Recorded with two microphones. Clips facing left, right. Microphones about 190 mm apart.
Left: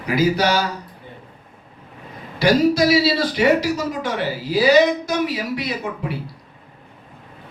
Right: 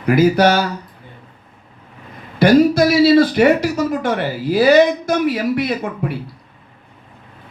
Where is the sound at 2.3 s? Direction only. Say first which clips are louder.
Right 4 dB; 55° right (ahead or behind).